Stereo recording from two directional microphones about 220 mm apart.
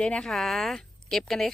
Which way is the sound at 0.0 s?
5° left (ahead or behind).